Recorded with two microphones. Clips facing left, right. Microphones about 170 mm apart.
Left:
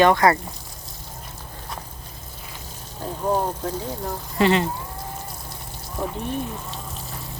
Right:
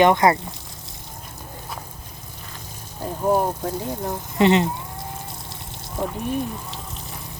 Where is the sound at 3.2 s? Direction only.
15° right (ahead or behind).